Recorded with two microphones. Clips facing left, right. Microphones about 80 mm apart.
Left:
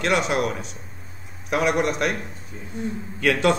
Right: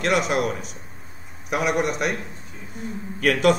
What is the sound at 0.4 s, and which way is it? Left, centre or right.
Speech, left.